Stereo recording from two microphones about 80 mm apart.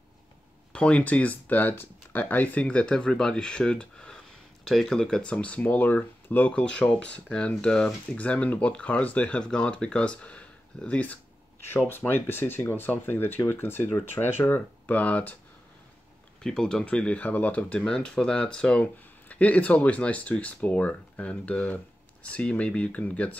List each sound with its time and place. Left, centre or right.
0.7 s speech: centre
12.0 s speech: left
16.4 s speech: centre